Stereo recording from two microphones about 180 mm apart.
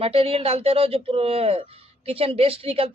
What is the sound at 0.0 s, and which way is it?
Speech, 30° right (ahead or behind).